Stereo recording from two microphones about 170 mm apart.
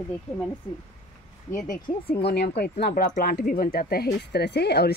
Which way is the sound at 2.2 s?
75° left (ahead or behind).